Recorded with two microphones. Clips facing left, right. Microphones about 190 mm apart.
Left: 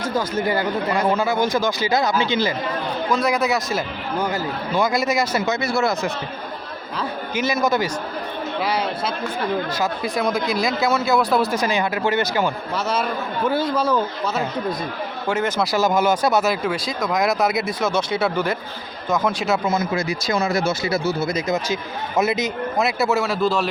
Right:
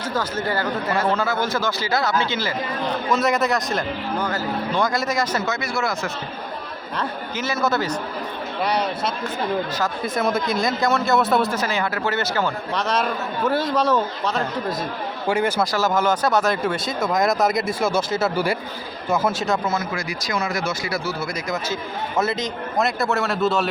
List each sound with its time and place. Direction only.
0.1 s a man's voice: 10° left (ahead or behind)
3.1 s a man's voice: centre (ahead or behind)
5.7 s speech: 25° left (ahead or behind)
7.3 s a man's voice: 15° left (ahead or behind)
9.7 s a man's voice: 10° left (ahead or behind)
10.2 s speech: centre (ahead or behind)
11.5 s a man's voice: 15° left (ahead or behind)
12.7 s speech: 5° left (ahead or behind)
15.3 s speech: 10° right (ahead or behind)
15.7 s speech: 15° left (ahead or behind)
17.7 s speech: 10° right (ahead or behind)
19.6 s speech: 20° left (ahead or behind); by 23.6 s centre (ahead or behind)